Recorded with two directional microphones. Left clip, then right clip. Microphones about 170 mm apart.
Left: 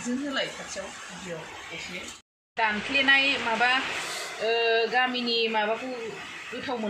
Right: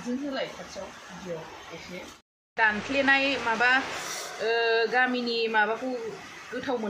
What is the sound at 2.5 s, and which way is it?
Speech, 5° right (ahead or behind).